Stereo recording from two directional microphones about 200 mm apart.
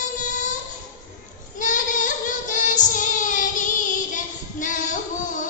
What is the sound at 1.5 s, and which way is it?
Child singing, 40° left (ahead or behind).